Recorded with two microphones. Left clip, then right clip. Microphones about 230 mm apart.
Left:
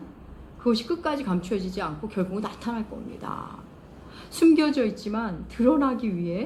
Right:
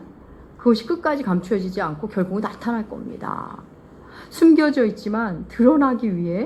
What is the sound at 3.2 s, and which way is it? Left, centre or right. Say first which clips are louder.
Speech: right 6 dB; right.